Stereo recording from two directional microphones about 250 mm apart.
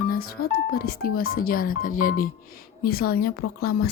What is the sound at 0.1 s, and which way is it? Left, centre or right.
Speech, left.